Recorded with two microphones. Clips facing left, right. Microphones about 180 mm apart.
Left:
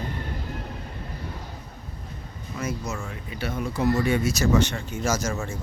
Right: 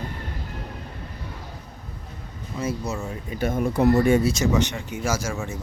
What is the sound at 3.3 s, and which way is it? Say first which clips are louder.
Speech: right 6 dB; 45° right (ahead or behind).